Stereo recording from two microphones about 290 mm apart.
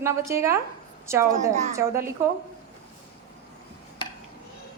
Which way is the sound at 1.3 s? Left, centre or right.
Right.